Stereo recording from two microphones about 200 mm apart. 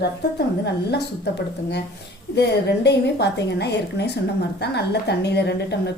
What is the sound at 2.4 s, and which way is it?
A woman's voice, 55° left (ahead or behind).